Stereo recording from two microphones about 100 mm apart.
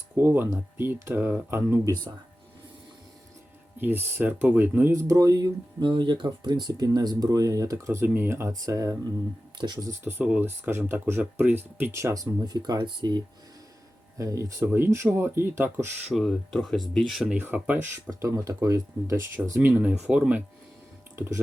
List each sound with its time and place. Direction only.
0.2 s speech: 20° right (ahead or behind)
1.8 s speech: 35° right (ahead or behind)
3.8 s speech: 20° right (ahead or behind); by 5.9 s 40° right (ahead or behind)
5.9 s speech: 55° right (ahead or behind); by 9.0 s 35° right (ahead or behind)
9.6 s speech: 50° right (ahead or behind)
10.0 s speech: 20° right (ahead or behind); by 13.2 s 50° right (ahead or behind)
14.2 s speech: 35° right (ahead or behind)
16.0 s speech: 5° left (ahead or behind)
17.3 s speech: 15° right (ahead or behind)
18.1 s speech: 35° right (ahead or behind)
19.5 s speech: 15° right (ahead or behind)